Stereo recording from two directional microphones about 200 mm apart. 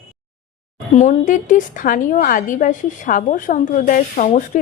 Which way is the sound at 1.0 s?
40° left (ahead or behind).